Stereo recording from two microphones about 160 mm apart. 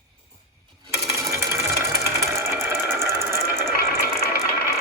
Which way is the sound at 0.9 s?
20° right (ahead or behind).